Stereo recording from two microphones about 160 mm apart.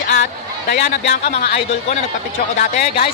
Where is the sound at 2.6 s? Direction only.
55° left (ahead or behind).